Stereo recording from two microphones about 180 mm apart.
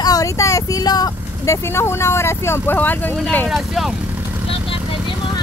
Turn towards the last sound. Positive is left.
turn(degrees=0)  # may be behind; listen again after turning